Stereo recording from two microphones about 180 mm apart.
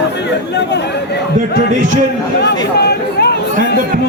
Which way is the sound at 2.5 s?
65° left (ahead or behind).